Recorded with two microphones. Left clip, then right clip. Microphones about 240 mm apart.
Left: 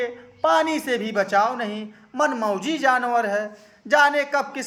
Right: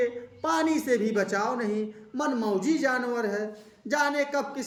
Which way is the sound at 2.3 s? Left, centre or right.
Centre.